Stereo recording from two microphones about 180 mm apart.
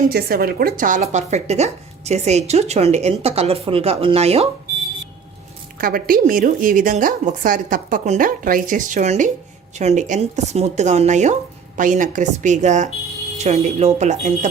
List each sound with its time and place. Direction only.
0.1 s speech: 60° right (ahead or behind); by 4.4 s 35° right (ahead or behind)
5.8 s a woman's voice: 50° right (ahead or behind)